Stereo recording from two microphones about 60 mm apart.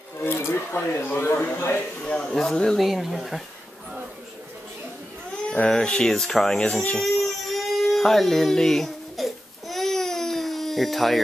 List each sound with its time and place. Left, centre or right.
0.2 s a sound: left
0.7 s speech: left
1.6 s speech: left
2.0 s speech: centre
5.5 s speech: centre
7.0 s a sound: centre